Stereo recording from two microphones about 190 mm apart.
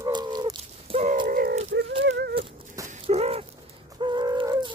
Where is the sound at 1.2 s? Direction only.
50° right (ahead or behind).